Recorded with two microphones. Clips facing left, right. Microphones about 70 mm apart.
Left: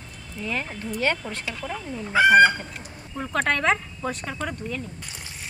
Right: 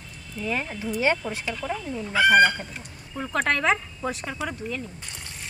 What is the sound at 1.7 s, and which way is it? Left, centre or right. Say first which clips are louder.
Speech: right 2 dB; centre.